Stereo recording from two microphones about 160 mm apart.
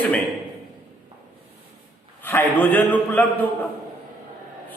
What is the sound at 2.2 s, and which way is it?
A man's voice, 10° left (ahead or behind).